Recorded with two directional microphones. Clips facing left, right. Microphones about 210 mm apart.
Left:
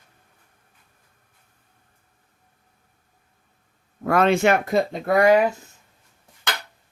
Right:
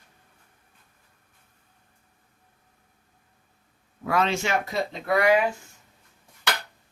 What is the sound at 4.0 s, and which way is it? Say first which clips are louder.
Speech: left 7 dB; 50° left (ahead or behind).